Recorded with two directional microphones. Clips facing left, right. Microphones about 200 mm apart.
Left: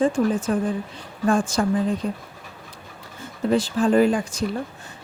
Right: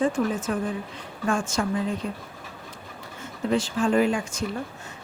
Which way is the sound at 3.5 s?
35° left (ahead or behind).